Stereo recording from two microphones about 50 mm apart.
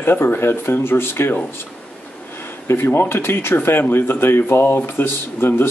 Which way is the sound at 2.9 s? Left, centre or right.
Left.